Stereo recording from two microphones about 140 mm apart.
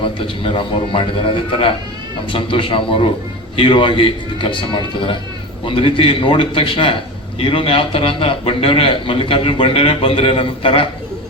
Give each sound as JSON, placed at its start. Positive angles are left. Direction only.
{"t": 0.0, "sound": "a man's voice", "side_deg": 40}